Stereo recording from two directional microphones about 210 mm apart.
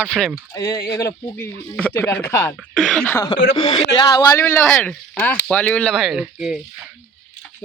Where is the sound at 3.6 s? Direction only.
25° left (ahead or behind); by 6.5 s 5° right (ahead or behind).